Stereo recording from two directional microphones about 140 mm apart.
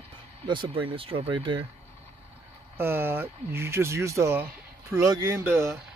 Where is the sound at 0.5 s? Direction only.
35° right (ahead or behind).